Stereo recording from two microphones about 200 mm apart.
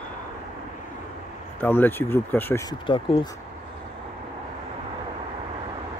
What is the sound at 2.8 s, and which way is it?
Speech, 25° left (ahead or behind).